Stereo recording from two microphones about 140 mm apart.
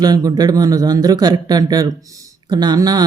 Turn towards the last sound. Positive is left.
turn(degrees=-30)  # may be behind; listen again after turning